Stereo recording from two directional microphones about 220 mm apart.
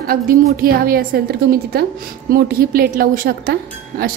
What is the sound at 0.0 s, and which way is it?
A woman's voice, 40° right (ahead or behind).